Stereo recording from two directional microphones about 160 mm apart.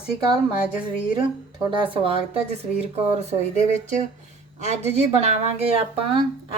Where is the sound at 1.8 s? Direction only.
35° right (ahead or behind).